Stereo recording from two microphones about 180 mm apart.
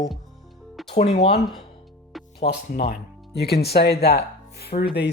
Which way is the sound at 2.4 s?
60° left (ahead or behind).